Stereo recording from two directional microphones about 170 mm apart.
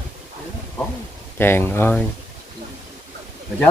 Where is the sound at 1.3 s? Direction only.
15° left (ahead or behind).